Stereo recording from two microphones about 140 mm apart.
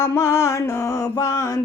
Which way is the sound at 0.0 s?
20° left (ahead or behind).